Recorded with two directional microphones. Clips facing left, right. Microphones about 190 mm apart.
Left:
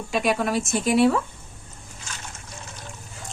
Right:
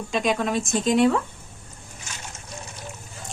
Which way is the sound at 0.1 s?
5° left (ahead or behind).